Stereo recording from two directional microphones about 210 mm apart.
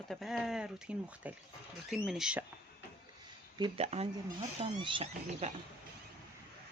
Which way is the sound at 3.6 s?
30° right (ahead or behind).